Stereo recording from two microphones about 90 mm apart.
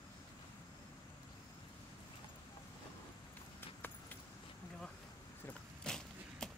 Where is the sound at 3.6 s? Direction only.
25° left (ahead or behind).